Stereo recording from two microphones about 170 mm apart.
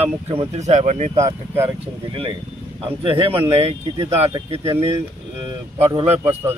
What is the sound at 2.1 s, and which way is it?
Speech, 30° right (ahead or behind).